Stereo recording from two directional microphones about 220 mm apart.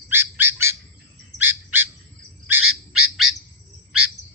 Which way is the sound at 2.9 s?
75° right (ahead or behind).